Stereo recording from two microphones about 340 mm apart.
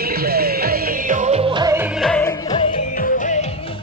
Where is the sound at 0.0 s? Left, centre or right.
Right; by 2.7 s centre.